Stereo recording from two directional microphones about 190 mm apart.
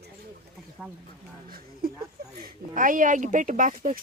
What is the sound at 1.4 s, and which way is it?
Speech, 50° right (ahead or behind).